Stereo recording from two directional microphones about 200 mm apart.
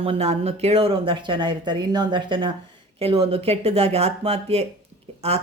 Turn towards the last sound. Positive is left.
turn(degrees=-30)  # may be behind; listen again after turning